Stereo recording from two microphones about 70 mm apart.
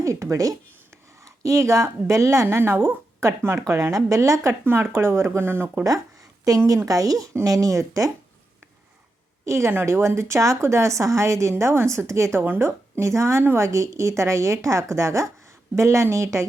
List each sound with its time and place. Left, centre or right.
0.0 s a woman's voice: right
4.6 s speech: right
6.5 s a woman's voice: right
9.5 s a woman's voice: right